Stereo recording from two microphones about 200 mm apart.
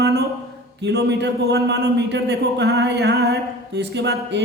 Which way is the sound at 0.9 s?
60° right (ahead or behind).